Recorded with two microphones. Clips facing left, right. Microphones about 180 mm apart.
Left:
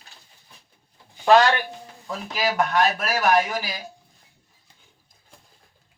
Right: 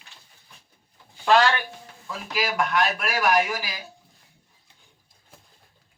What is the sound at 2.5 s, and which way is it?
Speech, 40° left (ahead or behind).